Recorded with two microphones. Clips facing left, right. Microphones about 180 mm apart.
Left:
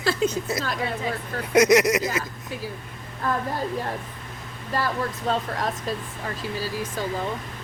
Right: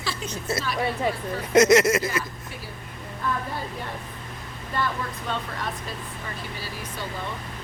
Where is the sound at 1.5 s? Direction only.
15° left (ahead or behind).